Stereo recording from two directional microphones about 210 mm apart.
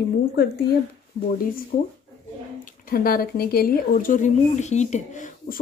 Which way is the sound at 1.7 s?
40° left (ahead or behind).